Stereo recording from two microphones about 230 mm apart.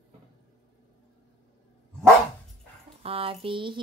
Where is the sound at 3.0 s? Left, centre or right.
Right.